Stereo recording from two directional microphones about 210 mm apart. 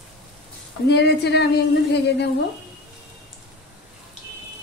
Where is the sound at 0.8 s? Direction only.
55° left (ahead or behind).